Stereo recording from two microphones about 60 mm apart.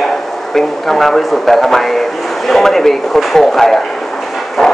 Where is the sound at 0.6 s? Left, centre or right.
Centre.